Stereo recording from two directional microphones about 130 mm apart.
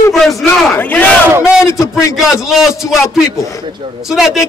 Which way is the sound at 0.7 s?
15° left (ahead or behind).